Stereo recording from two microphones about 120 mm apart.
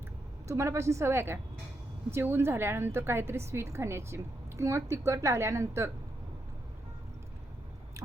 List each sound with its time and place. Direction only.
0.4 s a woman's voice: 25° right (ahead or behind)